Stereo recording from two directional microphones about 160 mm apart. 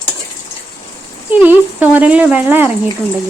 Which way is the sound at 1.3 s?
10° right (ahead or behind).